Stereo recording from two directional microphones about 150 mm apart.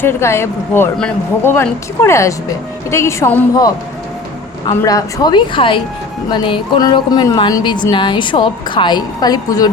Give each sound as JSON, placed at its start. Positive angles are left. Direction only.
{"t": 0.0, "sound": "speech", "side_deg": 15}
{"t": 4.8, "sound": "speech", "side_deg": 20}